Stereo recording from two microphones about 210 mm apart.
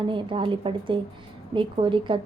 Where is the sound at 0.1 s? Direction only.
25° right (ahead or behind).